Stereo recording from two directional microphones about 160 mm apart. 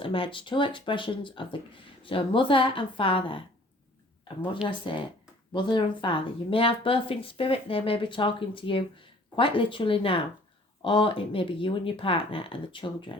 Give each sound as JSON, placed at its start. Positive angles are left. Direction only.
{"t": 0.0, "sound": "speech", "side_deg": 35}
{"t": 4.7, "sound": "speech", "side_deg": 30}